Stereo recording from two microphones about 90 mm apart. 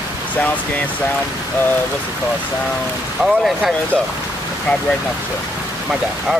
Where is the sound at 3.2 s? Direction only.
10° right (ahead or behind).